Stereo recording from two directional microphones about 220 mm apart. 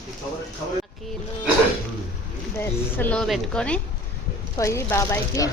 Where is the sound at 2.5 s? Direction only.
10° left (ahead or behind).